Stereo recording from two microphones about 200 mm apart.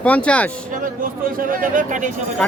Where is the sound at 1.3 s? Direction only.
45° right (ahead or behind).